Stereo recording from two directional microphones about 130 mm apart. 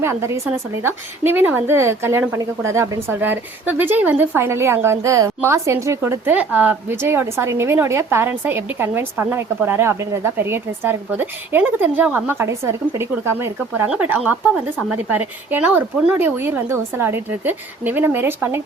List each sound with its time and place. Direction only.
0.0 s a woman's voice: 20° right (ahead or behind)